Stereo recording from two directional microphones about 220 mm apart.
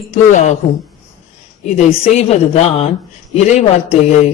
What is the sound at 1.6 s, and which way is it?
A man's voice, 30° left (ahead or behind).